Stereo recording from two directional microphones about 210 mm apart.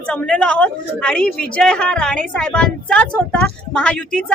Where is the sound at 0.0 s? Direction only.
5° left (ahead or behind).